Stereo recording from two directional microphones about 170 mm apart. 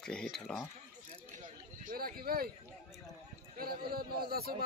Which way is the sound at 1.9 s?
60° right (ahead or behind).